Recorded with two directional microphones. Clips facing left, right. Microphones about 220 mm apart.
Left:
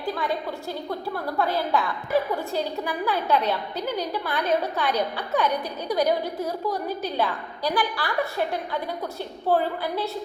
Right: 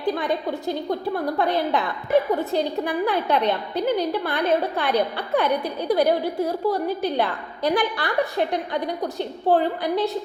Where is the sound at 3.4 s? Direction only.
60° right (ahead or behind).